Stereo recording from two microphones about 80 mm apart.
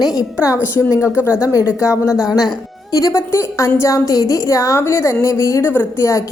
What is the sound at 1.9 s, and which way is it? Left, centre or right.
A woman's voice, left.